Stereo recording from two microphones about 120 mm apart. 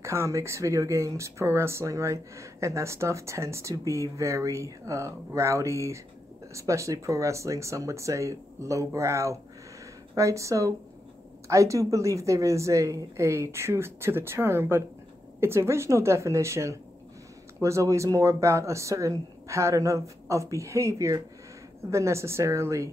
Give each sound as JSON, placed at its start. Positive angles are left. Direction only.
{"t": 0.0, "sound": "speech", "side_deg": -25}